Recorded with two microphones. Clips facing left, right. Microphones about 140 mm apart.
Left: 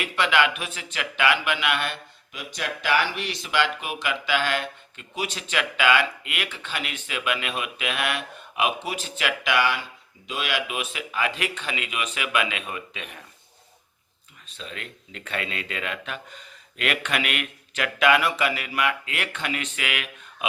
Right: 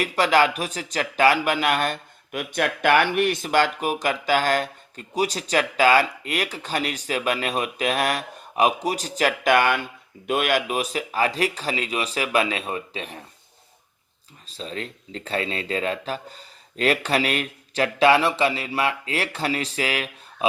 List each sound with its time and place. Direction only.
0.0 s speech: 40° right (ahead or behind)
2.3 s speech: 55° right (ahead or behind); by 13.2 s 35° right (ahead or behind)
14.4 s speech: 35° right (ahead or behind)